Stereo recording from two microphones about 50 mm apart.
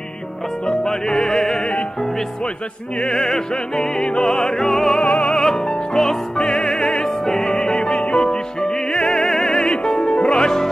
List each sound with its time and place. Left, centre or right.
0.8 s music: centre
3.0 s music: centre
4.9 s music: left